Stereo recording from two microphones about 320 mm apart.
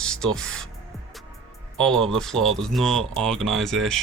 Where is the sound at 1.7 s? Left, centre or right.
Centre.